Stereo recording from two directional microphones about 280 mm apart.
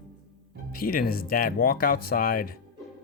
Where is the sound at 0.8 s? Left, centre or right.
Left.